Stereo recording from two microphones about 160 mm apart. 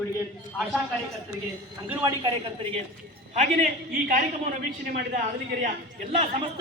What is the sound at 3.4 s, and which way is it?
A man's voice, 60° right (ahead or behind).